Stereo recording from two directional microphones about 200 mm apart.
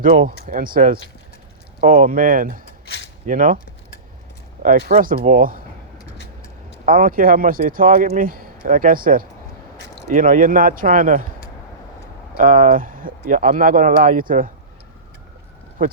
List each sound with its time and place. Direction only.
0.4 s speech: 45° right (ahead or behind)
2.8 s a sound: 55° left (ahead or behind)
3.2 s speech: 45° right (ahead or behind)
4.6 s speech: 40° right (ahead or behind)
6.8 s speech: 45° right (ahead or behind)
12.4 s speech: 45° right (ahead or behind)